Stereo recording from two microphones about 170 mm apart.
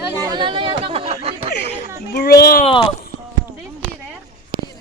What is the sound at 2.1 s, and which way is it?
Speech, 70° left (ahead or behind).